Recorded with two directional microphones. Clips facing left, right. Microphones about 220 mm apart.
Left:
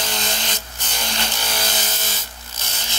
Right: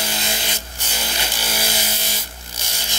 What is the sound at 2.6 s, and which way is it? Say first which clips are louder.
Zipper: even; 15° right (ahead or behind).